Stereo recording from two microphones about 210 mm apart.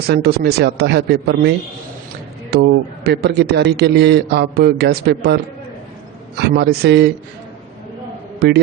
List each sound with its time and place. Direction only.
0.1 s a man's voice: 50° right (ahead or behind)
6.4 s a man's voice: 50° right (ahead or behind)
8.4 s a man's voice: 50° right (ahead or behind)